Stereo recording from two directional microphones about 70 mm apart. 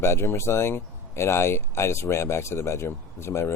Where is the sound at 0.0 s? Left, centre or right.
Left.